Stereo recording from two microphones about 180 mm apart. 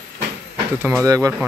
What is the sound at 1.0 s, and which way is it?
Speech, 20° right (ahead or behind).